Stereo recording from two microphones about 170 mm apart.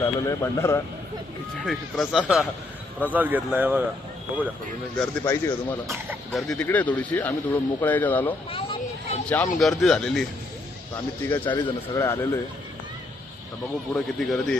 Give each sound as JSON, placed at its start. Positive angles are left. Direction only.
{"t": 0.0, "sound": "speech", "side_deg": 15}
{"t": 1.6, "sound": "speech", "side_deg": 0}
{"t": 4.9, "sound": "speech", "side_deg": 10}
{"t": 6.3, "sound": "speech", "side_deg": 0}
{"t": 8.4, "sound": "a sound", "side_deg": 35}
{"t": 9.6, "sound": "speech", "side_deg": 0}
{"t": 11.4, "sound": "speech", "side_deg": 20}
{"t": 13.9, "sound": "speech", "side_deg": 0}